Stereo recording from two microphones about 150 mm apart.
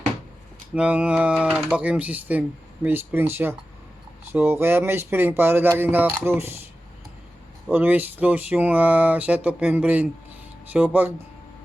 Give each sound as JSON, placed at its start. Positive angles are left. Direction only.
{"t": 0.7, "sound": "speech", "side_deg": -10}
{"t": 7.7, "sound": "speech", "side_deg": -10}